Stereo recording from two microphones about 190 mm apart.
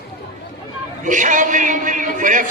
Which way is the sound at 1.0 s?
40° right (ahead or behind).